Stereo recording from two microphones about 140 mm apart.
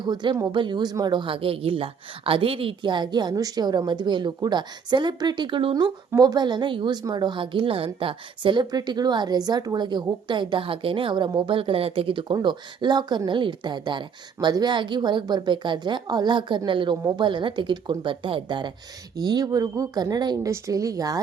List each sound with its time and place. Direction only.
0.0 s a woman's voice: 30° right (ahead or behind)